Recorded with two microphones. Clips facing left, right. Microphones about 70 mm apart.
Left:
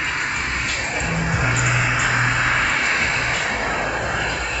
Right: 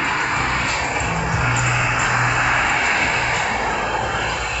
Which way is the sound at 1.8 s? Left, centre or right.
Centre.